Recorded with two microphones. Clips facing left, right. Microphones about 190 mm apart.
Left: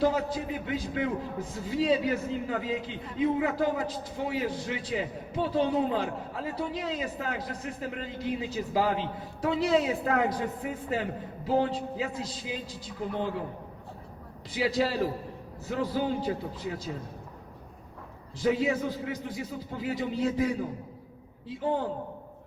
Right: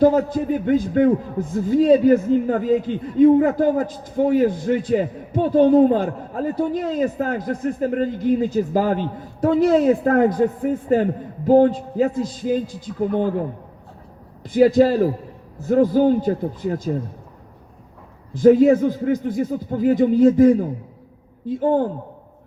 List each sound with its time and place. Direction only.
0.0 s a man's voice: 50° right (ahead or behind)
14.4 s a man's voice: 50° right (ahead or behind)
18.3 s a man's voice: 50° right (ahead or behind)